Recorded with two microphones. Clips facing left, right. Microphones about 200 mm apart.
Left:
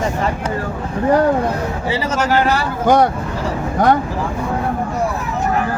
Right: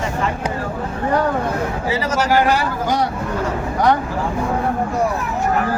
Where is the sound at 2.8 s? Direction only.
55° left (ahead or behind).